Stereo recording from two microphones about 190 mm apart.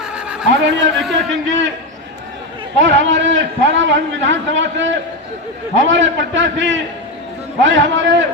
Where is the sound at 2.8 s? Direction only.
75° right (ahead or behind).